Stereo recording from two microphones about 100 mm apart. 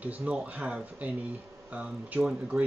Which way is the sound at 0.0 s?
15° right (ahead or behind).